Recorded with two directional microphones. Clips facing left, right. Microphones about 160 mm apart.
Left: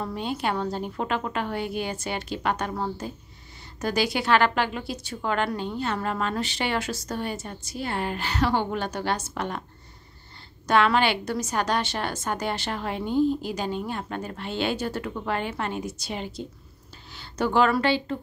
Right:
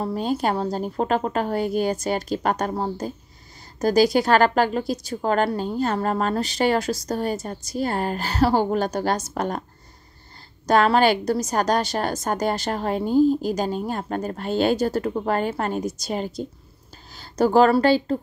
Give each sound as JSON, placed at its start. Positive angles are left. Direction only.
{"t": 0.0, "sound": "a woman's voice", "side_deg": -40}
{"t": 10.7, "sound": "a woman's voice", "side_deg": -40}